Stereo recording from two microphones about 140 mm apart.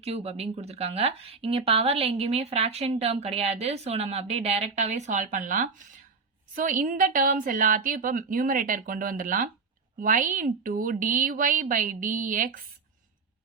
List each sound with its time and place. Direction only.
0.0 s a woman's voice: 45° right (ahead or behind); by 12.5 s 75° right (ahead or behind)